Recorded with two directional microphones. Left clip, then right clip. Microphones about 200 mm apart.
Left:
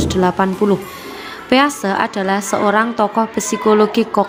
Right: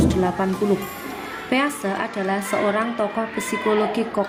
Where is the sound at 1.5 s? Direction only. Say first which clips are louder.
Left 8 dB; 30° left (ahead or behind).